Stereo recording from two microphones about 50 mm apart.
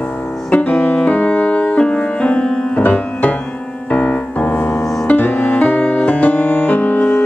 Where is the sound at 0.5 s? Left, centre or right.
Left.